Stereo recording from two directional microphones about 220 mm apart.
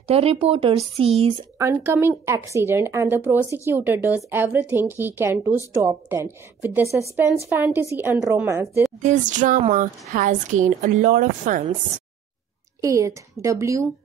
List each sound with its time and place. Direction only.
0.0 s speech: 25° right (ahead or behind)
1.6 s speech: 10° right (ahead or behind)
9.0 s speech: 35° right (ahead or behind)
12.8 s speech: 15° right (ahead or behind)